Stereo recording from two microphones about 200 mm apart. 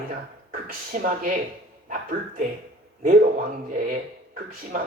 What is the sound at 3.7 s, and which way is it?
Speech, 45° right (ahead or behind).